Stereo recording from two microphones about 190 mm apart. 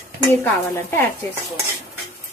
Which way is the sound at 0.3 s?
10° left (ahead or behind).